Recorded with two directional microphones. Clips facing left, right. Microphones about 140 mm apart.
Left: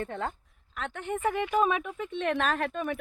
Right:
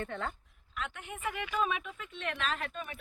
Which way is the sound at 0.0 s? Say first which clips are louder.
Left 4 dB; 35° left (ahead or behind).